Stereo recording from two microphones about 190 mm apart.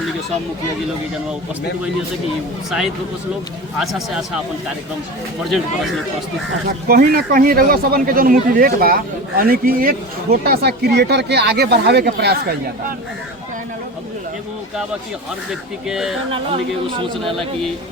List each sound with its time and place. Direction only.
2.6 s speech: centre (ahead or behind)
5.4 s speech: centre (ahead or behind)
6.8 s speech: 50° right (ahead or behind)
15.9 s speech: centre (ahead or behind)
17.2 s speech: centre (ahead or behind)